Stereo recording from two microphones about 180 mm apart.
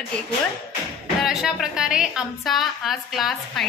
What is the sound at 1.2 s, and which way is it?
A woman's voice, centre (ahead or behind).